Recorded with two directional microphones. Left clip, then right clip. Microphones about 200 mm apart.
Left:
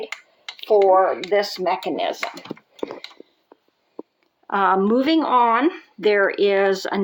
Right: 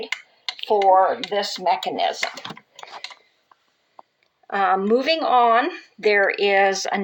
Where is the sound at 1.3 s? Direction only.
55° left (ahead or behind).